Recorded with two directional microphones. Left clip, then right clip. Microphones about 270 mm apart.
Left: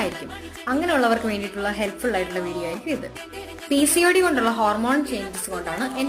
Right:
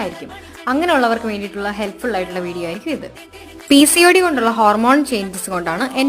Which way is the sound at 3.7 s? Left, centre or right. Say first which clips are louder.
Right 8 dB; right.